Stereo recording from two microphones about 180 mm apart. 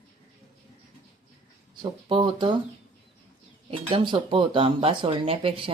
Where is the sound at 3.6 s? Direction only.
30° right (ahead or behind).